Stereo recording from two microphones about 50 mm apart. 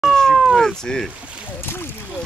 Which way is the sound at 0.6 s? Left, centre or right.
Centre.